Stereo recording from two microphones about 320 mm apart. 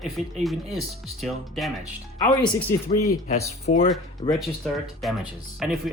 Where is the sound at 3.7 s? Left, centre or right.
Left.